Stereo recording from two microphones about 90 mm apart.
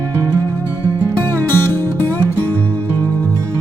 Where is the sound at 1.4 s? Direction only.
20° left (ahead or behind).